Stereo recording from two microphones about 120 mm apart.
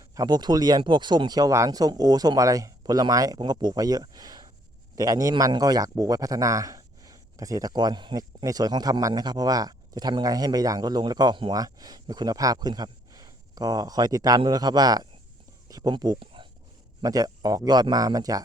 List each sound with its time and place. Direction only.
0.1 s speech: 30° right (ahead or behind)
17.0 s speech: 30° right (ahead or behind)